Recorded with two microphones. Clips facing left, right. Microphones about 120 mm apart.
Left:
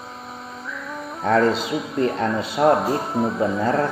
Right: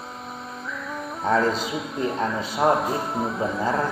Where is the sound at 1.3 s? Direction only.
70° left (ahead or behind).